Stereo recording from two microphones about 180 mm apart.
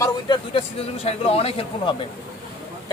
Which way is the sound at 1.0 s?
35° left (ahead or behind).